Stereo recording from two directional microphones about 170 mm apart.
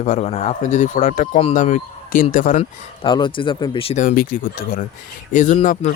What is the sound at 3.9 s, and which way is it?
Speech, 55° left (ahead or behind).